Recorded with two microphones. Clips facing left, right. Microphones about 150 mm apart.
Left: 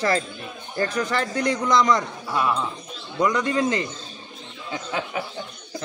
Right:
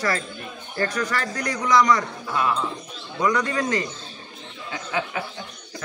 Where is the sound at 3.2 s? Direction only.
20° left (ahead or behind).